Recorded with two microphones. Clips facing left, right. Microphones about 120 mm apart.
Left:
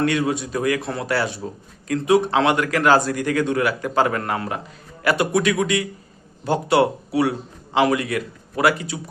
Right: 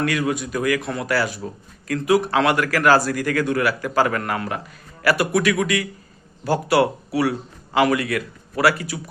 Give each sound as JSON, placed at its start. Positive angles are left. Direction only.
{"t": 0.0, "sound": "a man's voice", "side_deg": 25}